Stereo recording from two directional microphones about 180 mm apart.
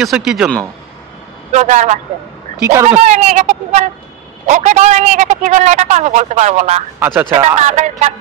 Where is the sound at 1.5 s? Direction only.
40° right (ahead or behind).